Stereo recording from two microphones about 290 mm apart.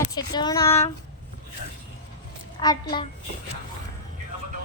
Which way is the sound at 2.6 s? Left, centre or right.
Centre.